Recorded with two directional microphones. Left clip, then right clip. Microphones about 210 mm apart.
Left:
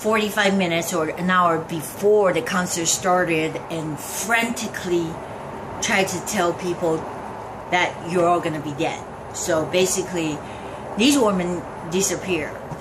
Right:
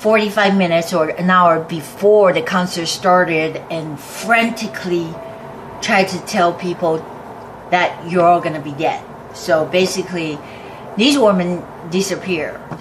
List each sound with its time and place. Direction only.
0.0 s a woman's voice: 5° left (ahead or behind)
7.7 s a woman's voice: 5° left (ahead or behind)